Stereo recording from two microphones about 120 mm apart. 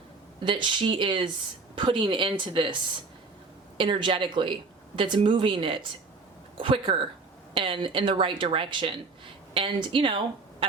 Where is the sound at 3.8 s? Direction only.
45° right (ahead or behind).